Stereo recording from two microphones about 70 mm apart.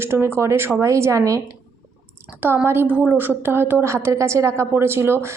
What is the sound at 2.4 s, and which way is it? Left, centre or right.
A woman's voice, right.